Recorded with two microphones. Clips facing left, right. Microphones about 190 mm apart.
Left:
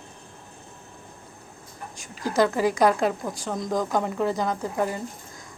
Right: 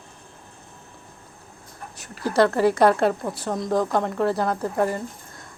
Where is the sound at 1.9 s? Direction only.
35° right (ahead or behind).